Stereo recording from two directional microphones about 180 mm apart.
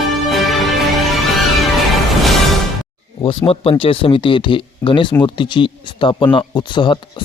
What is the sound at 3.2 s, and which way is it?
Speech, 30° left (ahead or behind).